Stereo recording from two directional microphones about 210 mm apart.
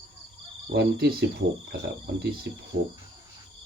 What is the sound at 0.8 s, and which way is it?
Speech, 50° right (ahead or behind).